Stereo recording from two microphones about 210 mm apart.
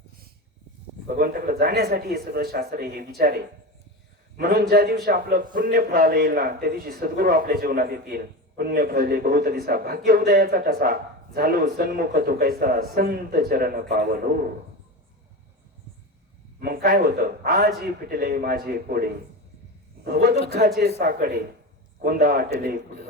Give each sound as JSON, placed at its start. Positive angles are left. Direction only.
{"t": 1.0, "sound": "a man's voice", "side_deg": -45}
{"t": 4.4, "sound": "a man's voice", "side_deg": -45}
{"t": 16.6, "sound": "a man's voice", "side_deg": -45}
{"t": 20.1, "sound": "a man's voice", "side_deg": -50}